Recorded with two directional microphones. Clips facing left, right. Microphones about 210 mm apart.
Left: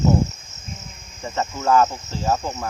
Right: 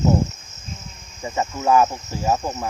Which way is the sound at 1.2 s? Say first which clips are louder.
Right 1 dB; 15° right (ahead or behind).